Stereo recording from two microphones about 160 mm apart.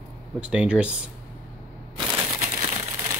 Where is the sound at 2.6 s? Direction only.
20° right (ahead or behind).